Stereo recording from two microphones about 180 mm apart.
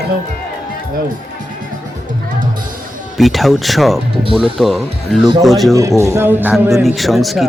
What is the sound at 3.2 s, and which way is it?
Speech, centre (ahead or behind).